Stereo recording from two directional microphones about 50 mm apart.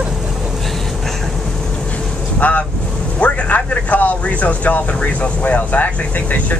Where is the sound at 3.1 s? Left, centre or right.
Left.